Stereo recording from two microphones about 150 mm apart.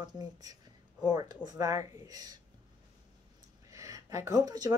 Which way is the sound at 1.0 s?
25° right (ahead or behind).